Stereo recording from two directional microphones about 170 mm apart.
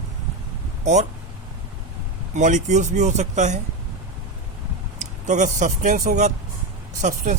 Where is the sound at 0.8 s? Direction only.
45° right (ahead or behind).